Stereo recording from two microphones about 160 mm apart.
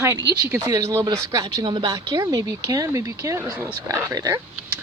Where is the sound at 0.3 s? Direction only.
90° right.